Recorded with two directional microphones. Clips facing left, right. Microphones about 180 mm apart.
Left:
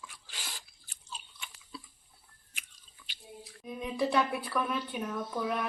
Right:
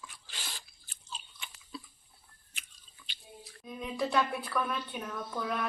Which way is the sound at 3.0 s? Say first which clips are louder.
Left 3 dB; 5° left (ahead or behind).